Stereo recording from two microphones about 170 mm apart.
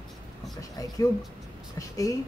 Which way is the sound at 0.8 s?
20° left (ahead or behind).